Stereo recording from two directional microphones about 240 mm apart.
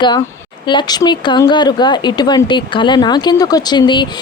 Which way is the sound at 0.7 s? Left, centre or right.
Centre.